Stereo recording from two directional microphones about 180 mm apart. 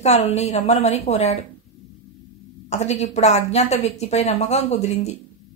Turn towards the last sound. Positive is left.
turn(degrees=35)  # may be behind; listen again after turning